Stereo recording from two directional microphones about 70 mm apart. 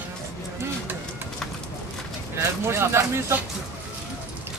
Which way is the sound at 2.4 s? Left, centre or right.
Right.